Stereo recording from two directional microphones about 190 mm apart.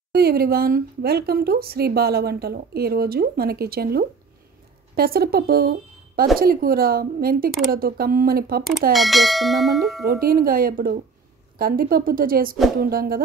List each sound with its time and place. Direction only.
0.1 s a woman's voice: 55° right (ahead or behind)
8.9 s bell: centre (ahead or behind)
10.0 s speech: 50° right (ahead or behind)